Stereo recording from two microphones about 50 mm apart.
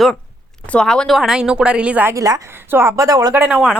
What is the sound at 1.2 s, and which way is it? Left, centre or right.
Speech, centre.